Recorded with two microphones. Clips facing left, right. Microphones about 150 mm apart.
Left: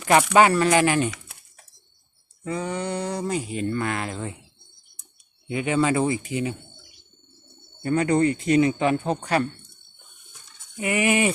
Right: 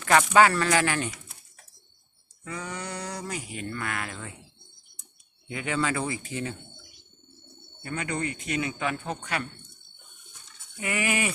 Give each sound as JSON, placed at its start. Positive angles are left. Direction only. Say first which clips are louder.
{"t": 0.0, "sound": "speech", "louder": "left 3 dB", "side_deg": 20}
{"t": 2.4, "sound": "speech", "louder": "left 8 dB", "side_deg": 25}
{"t": 5.5, "sound": "speech", "louder": "left 7 dB", "side_deg": 20}
{"t": 7.8, "sound": "speech", "louder": "left 11 dB", "side_deg": 35}
{"t": 10.8, "sound": "speech", "louder": "left 7 dB", "side_deg": 20}